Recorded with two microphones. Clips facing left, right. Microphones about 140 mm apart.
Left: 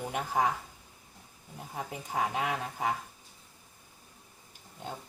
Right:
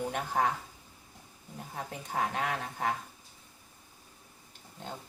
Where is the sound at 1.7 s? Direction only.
10° left (ahead or behind).